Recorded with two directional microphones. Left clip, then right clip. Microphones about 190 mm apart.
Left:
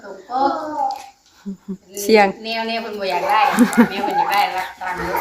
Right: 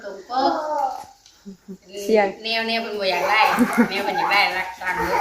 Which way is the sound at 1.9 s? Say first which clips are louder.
Left 5 dB; 30° left (ahead or behind).